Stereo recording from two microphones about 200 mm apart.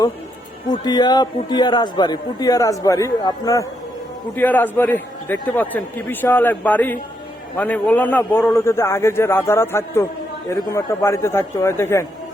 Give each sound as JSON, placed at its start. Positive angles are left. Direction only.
{"t": 0.7, "sound": "a man's voice", "side_deg": 20}